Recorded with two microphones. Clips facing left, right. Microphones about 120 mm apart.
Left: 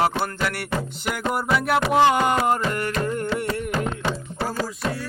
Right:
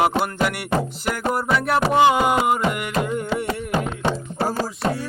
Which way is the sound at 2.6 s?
15° right (ahead or behind).